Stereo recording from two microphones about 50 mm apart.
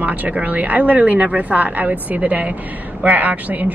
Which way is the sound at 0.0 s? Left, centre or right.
Right.